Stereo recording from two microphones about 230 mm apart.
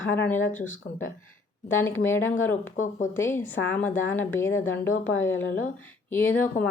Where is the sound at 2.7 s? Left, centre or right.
Left.